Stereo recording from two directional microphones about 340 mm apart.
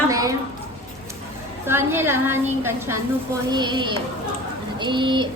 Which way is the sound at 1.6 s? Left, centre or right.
Centre.